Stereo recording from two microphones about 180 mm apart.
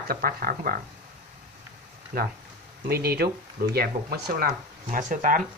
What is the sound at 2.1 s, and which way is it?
Speech, 50° right (ahead or behind).